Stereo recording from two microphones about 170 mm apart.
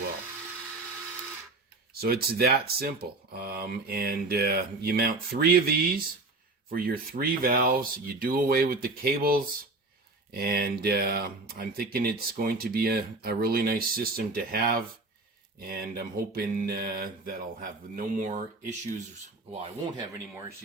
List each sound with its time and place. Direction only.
1.9 s speech: 65° right (ahead or behind)